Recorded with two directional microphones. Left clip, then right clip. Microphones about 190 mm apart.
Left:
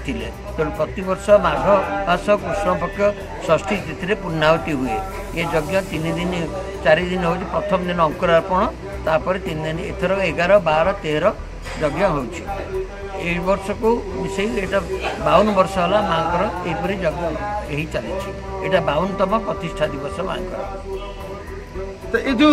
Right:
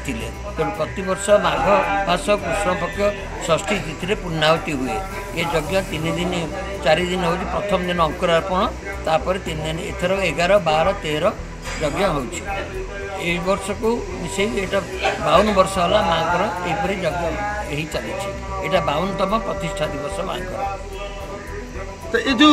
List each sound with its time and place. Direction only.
0.1 s a man's voice: centre (ahead or behind)
13.2 s a man's voice: centre (ahead or behind)
18.6 s a man's voice: centre (ahead or behind)
22.1 s a man's voice: 25° left (ahead or behind)